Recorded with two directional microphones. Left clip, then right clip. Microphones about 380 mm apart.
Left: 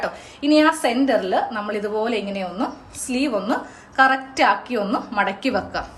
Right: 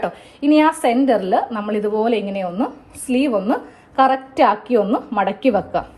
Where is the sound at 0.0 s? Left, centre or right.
Centre.